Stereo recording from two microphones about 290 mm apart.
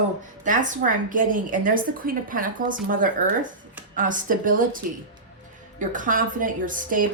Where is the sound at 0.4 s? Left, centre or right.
Right.